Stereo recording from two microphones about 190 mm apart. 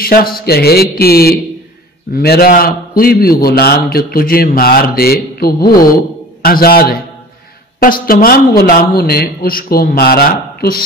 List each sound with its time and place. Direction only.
0.0 s a man's voice: 50° left (ahead or behind)